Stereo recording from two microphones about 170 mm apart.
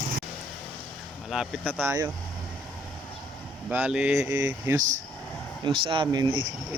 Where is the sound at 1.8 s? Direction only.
15° right (ahead or behind).